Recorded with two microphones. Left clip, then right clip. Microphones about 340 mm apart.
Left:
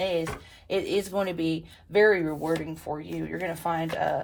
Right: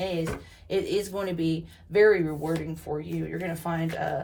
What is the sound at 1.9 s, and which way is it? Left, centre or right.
Speech, centre.